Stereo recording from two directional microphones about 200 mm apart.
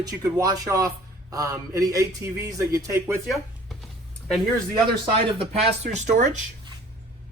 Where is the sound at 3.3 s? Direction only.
Centre (ahead or behind).